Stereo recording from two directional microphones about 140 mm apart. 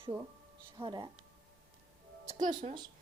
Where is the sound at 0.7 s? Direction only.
35° right (ahead or behind).